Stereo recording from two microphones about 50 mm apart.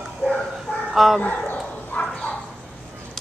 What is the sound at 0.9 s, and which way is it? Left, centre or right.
Speech, centre.